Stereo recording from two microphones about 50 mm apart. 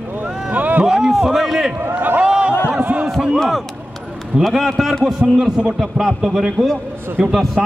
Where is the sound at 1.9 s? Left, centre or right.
Right.